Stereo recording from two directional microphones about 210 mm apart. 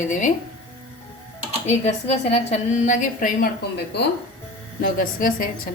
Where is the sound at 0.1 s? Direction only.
35° left (ahead or behind).